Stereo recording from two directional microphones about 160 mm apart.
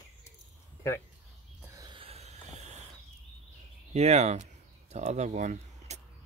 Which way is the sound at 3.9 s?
45° right (ahead or behind).